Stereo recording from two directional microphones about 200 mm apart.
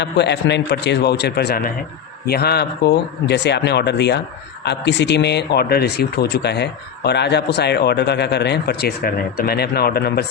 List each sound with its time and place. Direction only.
0.0 s speech: 60° left (ahead or behind)